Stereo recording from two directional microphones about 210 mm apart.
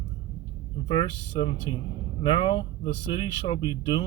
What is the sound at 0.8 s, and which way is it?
Speech, 25° left (ahead or behind).